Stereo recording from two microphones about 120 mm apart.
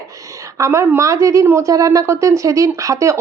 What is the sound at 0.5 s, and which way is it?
A woman's voice, 25° right (ahead or behind).